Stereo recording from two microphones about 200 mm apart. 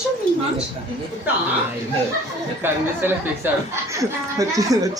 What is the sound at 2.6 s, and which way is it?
Speech, 10° right (ahead or behind).